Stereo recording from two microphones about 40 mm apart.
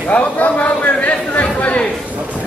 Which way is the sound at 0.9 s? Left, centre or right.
Left.